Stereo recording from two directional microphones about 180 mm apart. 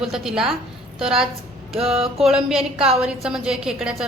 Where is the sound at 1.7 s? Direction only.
35° right (ahead or behind).